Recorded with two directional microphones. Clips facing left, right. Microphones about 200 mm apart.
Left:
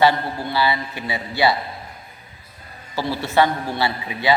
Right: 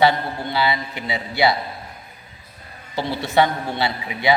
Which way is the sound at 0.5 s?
20° right (ahead or behind).